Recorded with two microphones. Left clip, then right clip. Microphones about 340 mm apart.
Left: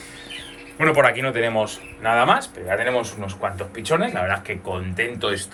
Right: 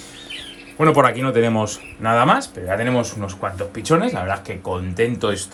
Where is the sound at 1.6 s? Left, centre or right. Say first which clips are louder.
Even; right.